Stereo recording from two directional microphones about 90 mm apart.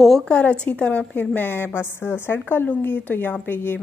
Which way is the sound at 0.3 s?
10° left (ahead or behind).